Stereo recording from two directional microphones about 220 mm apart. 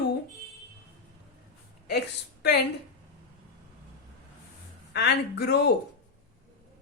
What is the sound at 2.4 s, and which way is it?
Speech, 50° left (ahead or behind).